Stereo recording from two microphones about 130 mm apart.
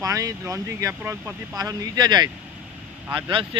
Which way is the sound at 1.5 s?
30° right (ahead or behind).